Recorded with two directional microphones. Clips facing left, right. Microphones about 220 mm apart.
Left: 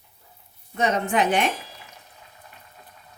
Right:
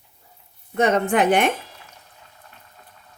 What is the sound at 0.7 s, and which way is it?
Speech, 55° right (ahead or behind).